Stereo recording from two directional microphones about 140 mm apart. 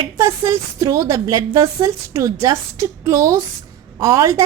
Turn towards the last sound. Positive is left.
turn(degrees=-25)  # may be behind; listen again after turning